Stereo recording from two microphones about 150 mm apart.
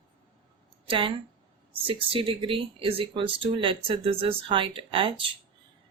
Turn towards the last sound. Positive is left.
turn(degrees=-35)  # may be behind; listen again after turning